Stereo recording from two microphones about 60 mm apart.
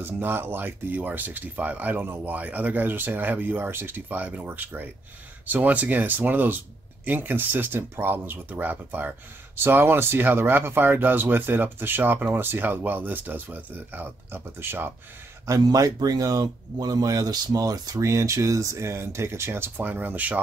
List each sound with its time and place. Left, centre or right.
0.0 s speech: right
15.4 s a man's voice: right
18.0 s speech: right
19.8 s speech: right